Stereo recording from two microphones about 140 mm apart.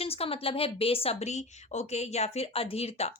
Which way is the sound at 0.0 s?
45° left (ahead or behind).